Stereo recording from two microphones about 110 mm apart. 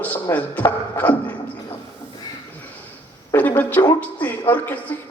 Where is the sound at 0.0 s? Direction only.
15° left (ahead or behind).